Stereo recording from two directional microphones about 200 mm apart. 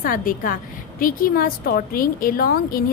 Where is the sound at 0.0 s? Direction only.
45° left (ahead or behind).